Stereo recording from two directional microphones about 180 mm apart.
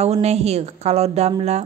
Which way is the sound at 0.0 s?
35° right (ahead or behind).